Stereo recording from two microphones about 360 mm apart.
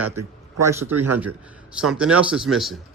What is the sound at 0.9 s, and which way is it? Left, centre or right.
Speech, right.